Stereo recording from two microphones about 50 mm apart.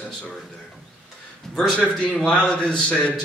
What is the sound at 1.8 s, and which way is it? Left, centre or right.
A man's voice, centre.